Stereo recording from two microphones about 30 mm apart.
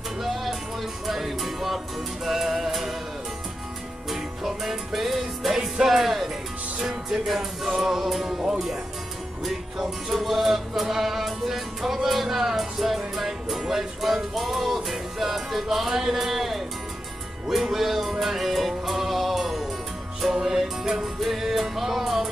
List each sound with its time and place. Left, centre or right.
0.2 s music: centre
4.1 s music: centre
8.3 s music: right
9.8 s music: centre